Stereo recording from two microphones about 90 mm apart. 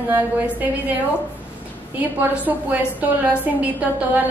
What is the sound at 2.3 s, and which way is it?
Speech, 15° right (ahead or behind).